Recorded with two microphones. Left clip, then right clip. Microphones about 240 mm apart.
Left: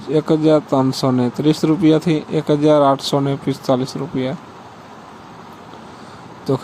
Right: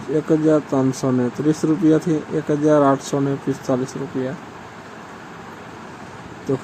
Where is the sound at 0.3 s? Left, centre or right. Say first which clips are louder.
Left 2 dB; left.